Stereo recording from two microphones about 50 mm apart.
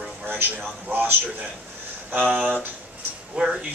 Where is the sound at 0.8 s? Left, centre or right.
Right.